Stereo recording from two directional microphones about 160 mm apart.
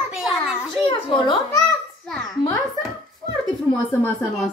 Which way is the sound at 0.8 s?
30° left (ahead or behind).